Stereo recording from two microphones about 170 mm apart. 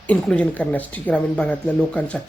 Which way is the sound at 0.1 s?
10° left (ahead or behind).